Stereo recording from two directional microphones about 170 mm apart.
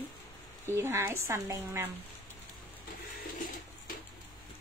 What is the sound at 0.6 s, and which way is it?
A woman's voice, 15° right (ahead or behind).